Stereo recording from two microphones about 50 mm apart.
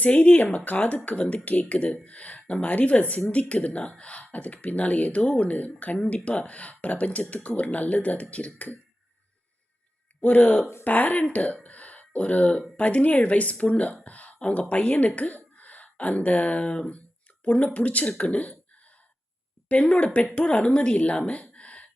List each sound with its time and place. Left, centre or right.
0.0 s speech: left
10.2 s speech: left
14.0 s a sound: left
14.5 s speech: left
19.6 s speech: left
21.5 s a sound: left